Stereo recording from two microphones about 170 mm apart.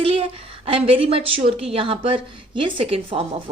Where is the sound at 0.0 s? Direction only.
35° right (ahead or behind).